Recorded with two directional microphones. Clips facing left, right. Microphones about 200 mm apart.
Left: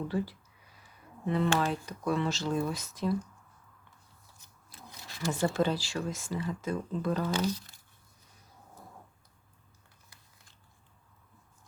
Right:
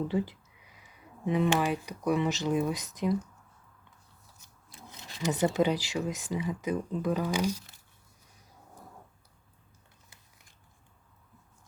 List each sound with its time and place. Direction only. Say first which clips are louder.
0.1 s speech: right 2 dB; 20° right (ahead or behind)
4.7 s speech: right 1 dB; 20° right (ahead or behind)